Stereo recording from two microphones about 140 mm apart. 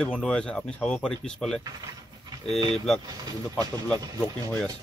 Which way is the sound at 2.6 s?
35° right (ahead or behind).